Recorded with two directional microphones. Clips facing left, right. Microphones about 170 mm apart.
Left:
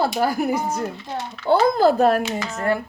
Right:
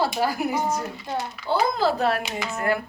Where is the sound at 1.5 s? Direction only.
50° left (ahead or behind).